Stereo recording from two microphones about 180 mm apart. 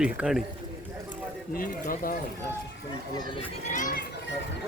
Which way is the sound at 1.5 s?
50° left (ahead or behind).